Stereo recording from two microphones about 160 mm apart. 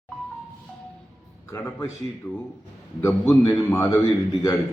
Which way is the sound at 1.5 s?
10° left (ahead or behind).